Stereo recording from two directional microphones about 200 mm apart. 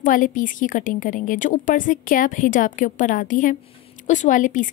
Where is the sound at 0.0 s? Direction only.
40° left (ahead or behind).